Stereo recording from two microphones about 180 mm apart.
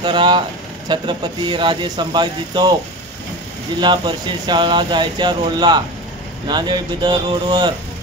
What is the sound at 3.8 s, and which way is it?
Speech, 25° right (ahead or behind).